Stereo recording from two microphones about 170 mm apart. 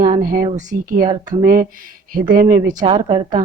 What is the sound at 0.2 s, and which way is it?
Speech, 55° right (ahead or behind).